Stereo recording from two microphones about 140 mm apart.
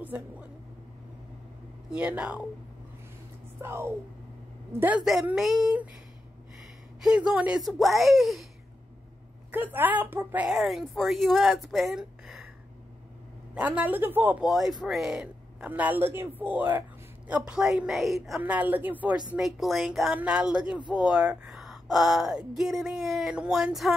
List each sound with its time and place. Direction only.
0.1 s speech: 15° right (ahead or behind)
1.9 s speech: 10° right (ahead or behind)
3.6 s speech: 15° right (ahead or behind)
7.0 s speech: 5° right (ahead or behind)
9.5 s speech: 15° right (ahead or behind)
13.6 s speech: 10° right (ahead or behind)
14.4 s speech: centre (ahead or behind)
18.4 s speech: 10° right (ahead or behind)
19.3 s speech: centre (ahead or behind)